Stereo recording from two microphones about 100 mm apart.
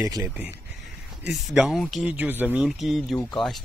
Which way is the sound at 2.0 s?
20° right (ahead or behind).